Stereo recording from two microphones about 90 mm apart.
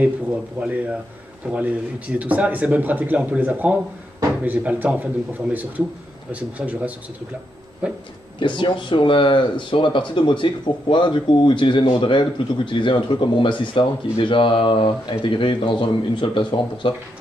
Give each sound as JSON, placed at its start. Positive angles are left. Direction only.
{"t": 0.0, "sound": "speech", "side_deg": -15}
{"t": 8.4, "sound": "speech", "side_deg": 65}